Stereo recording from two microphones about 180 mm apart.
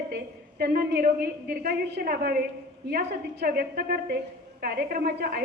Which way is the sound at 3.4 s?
60° right (ahead or behind).